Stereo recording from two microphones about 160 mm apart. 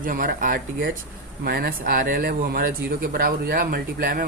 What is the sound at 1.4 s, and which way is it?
Speech, 70° right (ahead or behind).